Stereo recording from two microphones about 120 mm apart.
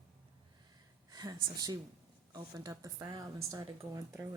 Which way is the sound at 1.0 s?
30° right (ahead or behind).